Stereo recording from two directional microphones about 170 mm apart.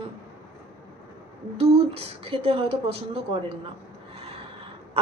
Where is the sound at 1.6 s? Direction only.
35° right (ahead or behind).